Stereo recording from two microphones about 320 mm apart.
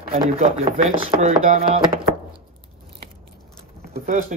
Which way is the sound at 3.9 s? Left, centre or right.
Right.